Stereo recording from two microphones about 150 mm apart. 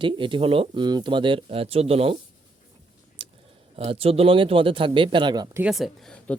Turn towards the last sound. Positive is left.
turn(degrees=0)  # may be behind; listen again after turning